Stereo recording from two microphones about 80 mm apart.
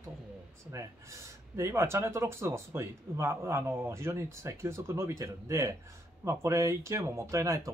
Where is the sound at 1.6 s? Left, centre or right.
Right.